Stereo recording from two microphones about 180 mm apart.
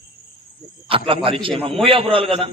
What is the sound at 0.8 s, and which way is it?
A man's voice, 30° right (ahead or behind).